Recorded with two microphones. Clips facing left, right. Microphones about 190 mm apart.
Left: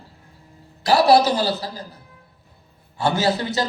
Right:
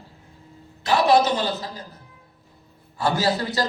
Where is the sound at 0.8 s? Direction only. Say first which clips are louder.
Left 3 dB; 35° left (ahead or behind).